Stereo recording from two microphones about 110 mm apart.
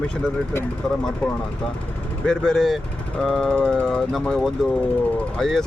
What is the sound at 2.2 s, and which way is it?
Speech, 5° left (ahead or behind).